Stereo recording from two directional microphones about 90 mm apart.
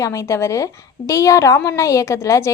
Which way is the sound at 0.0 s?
30° left (ahead or behind).